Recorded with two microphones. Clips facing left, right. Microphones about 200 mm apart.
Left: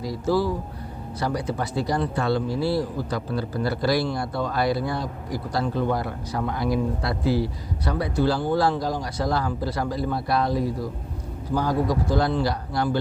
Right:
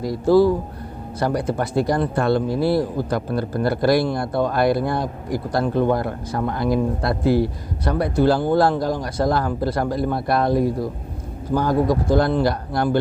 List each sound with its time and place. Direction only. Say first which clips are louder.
0.0 s speech: right 8 dB; 55° right (ahead or behind)